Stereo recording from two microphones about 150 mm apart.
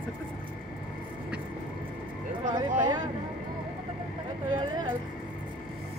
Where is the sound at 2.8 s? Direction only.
30° right (ahead or behind).